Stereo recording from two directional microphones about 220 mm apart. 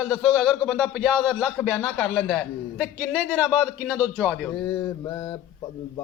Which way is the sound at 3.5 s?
5° right (ahead or behind).